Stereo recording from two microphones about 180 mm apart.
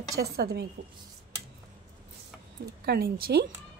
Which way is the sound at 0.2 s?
60° right (ahead or behind).